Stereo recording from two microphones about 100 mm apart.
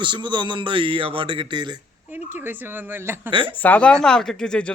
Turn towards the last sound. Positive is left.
turn(degrees=10)  # may be behind; listen again after turning